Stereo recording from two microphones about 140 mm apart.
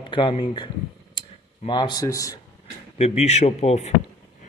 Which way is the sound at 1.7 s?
35° left (ahead or behind).